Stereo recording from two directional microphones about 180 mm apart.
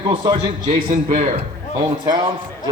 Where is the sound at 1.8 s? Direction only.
25° right (ahead or behind).